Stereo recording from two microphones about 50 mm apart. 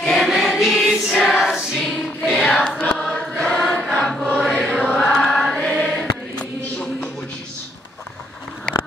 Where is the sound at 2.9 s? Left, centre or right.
Centre.